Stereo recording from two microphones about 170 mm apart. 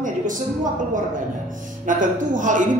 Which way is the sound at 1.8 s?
50° right (ahead or behind).